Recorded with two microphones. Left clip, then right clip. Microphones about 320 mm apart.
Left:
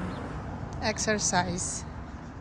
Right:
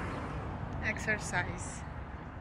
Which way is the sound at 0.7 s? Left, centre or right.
Centre.